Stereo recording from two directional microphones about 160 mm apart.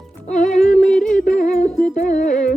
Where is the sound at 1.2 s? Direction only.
55° left (ahead or behind).